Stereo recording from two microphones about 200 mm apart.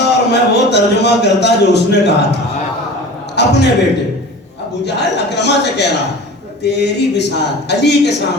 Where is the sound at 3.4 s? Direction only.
55° left (ahead or behind).